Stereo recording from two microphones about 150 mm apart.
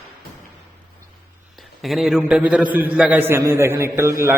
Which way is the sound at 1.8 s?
Centre (ahead or behind).